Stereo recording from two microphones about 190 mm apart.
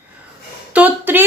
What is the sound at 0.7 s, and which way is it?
Speech, 10° right (ahead or behind).